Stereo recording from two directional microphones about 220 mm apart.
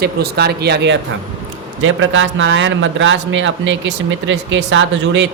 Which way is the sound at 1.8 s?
60° right (ahead or behind).